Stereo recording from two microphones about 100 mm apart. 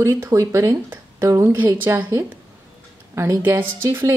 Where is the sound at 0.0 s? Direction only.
30° right (ahead or behind).